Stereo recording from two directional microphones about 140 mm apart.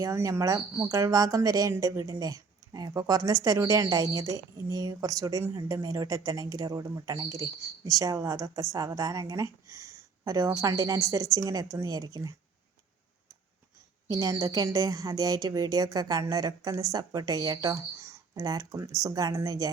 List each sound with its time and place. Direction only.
0.0 s speech: 20° right (ahead or behind)
14.1 s speech: 25° right (ahead or behind)